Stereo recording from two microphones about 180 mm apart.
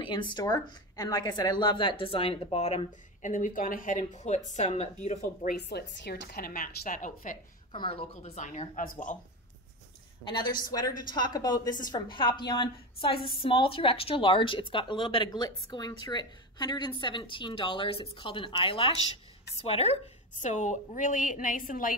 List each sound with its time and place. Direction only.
0.0 s a woman's voice: 25° left (ahead or behind); by 5.6 s 45° left (ahead or behind)
5.6 s a woman's voice: 65° left (ahead or behind); by 7.3 s 45° left (ahead or behind)
7.7 s a woman's voice: 30° left (ahead or behind); by 8.9 s 45° left (ahead or behind)
10.7 s a woman's voice: 20° left (ahead or behind); by 21.9 s 50° left (ahead or behind)